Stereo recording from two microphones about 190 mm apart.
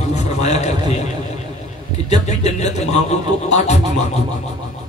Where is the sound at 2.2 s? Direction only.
35° left (ahead or behind).